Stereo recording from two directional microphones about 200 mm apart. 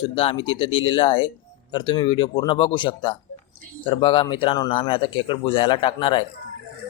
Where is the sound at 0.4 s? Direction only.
25° left (ahead or behind).